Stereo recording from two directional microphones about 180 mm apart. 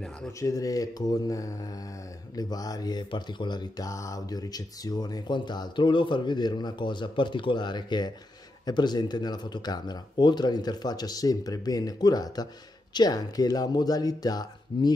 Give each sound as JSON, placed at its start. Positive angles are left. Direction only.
{"t": 0.4, "sound": "speech", "side_deg": 20}